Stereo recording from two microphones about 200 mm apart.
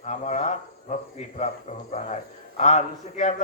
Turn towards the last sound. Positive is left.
turn(degrees=35)  # may be behind; listen again after turning